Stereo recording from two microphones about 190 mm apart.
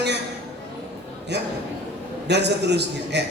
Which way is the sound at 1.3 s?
65° right (ahead or behind).